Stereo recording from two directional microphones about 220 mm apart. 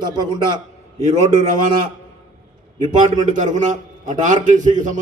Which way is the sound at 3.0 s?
35° right (ahead or behind).